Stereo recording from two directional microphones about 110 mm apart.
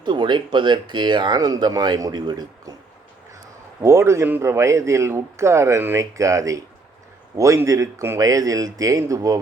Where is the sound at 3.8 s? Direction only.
25° right (ahead or behind).